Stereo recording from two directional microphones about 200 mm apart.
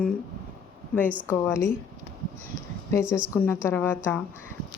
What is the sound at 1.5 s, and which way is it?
Speech, 15° left (ahead or behind).